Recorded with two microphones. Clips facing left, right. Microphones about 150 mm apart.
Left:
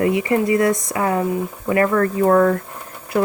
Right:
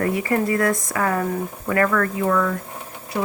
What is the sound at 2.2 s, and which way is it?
Speech, 45° left (ahead or behind).